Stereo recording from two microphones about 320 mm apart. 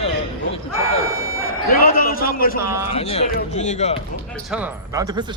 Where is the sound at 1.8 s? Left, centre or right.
Left.